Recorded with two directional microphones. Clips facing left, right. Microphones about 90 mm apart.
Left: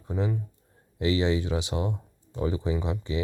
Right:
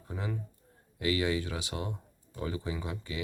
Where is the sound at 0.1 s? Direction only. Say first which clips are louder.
Left 8 dB; 25° left (ahead or behind).